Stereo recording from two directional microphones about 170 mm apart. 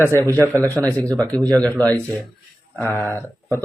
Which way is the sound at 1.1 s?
20° right (ahead or behind).